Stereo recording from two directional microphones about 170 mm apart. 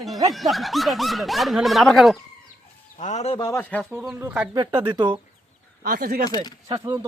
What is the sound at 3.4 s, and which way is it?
Speech, 15° left (ahead or behind).